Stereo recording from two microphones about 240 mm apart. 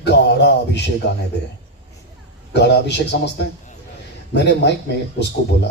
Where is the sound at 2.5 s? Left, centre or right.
Left.